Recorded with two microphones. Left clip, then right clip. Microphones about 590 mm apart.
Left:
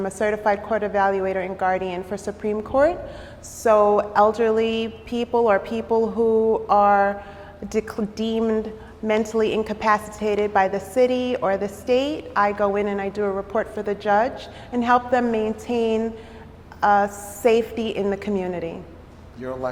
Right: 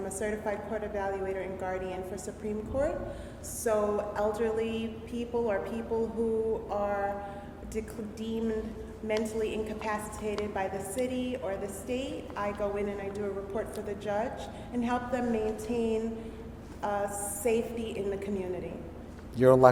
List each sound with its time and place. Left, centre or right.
0.2 s a woman's voice: left
19.4 s a man's voice: right